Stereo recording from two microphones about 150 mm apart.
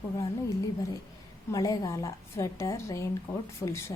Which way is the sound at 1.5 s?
20° left (ahead or behind).